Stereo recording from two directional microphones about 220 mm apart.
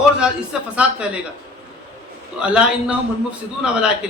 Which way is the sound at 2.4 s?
5° right (ahead or behind).